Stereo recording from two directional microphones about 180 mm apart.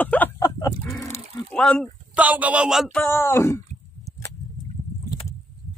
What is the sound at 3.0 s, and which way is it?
Speech, 15° left (ahead or behind).